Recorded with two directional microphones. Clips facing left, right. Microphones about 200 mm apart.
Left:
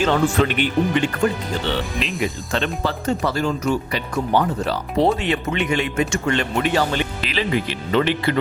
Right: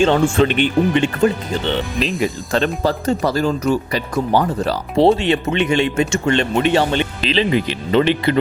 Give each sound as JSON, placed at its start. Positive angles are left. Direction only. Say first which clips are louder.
{"t": 0.0, "sound": "speech", "louder": "right 4 dB", "side_deg": -25}
{"t": 2.2, "sound": "speech", "louder": "right 4 dB", "side_deg": -40}